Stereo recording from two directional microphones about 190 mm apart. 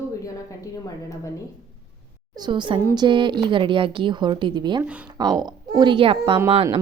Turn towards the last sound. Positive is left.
turn(degrees=-30)  # may be behind; listen again after turning